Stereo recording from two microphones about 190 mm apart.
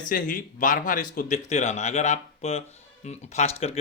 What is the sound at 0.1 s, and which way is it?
Speech, 45° left (ahead or behind).